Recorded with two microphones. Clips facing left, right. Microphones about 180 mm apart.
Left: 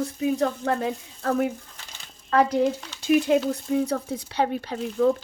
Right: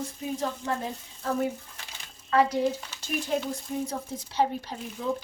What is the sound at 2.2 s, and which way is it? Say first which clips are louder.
Speech: left 3 dB; 50° left (ahead or behind).